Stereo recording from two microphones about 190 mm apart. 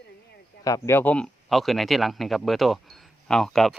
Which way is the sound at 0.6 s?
15° left (ahead or behind).